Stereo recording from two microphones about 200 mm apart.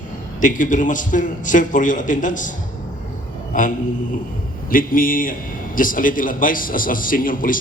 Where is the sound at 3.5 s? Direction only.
40° left (ahead or behind).